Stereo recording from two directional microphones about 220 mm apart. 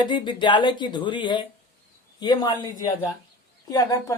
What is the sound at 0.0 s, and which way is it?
Speech, 20° left (ahead or behind).